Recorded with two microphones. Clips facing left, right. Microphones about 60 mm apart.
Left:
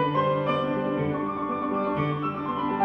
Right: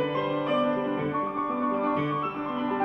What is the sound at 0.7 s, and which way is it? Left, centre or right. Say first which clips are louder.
Music: left 1 dB; centre.